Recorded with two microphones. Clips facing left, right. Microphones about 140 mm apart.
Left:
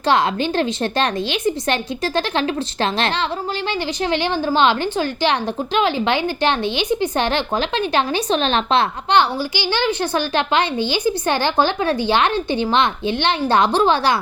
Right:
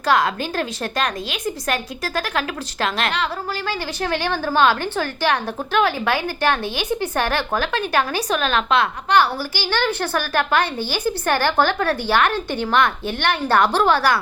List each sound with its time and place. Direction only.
0.0 s a woman's voice: 25° left (ahead or behind)